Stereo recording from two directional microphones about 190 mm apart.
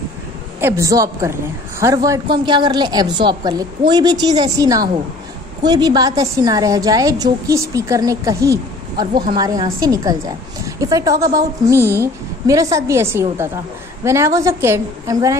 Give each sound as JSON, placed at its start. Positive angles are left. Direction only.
{"t": 0.6, "sound": "a woman's voice", "side_deg": -15}